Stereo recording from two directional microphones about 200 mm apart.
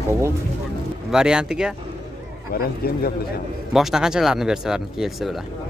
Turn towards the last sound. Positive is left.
turn(degrees=0)  # may be behind; listen again after turning